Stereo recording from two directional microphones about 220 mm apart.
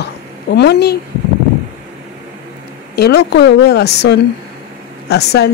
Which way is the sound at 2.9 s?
50° left (ahead or behind).